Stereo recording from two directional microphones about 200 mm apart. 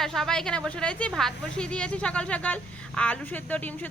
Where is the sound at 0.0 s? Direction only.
Centre (ahead or behind).